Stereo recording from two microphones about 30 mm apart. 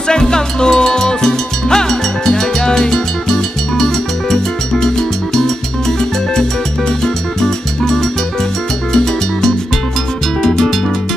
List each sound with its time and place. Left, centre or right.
0.1 s music: left
7.0 s music: centre
8.9 s music: centre